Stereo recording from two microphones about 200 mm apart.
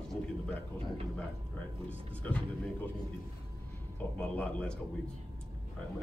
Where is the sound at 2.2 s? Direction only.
5° left (ahead or behind).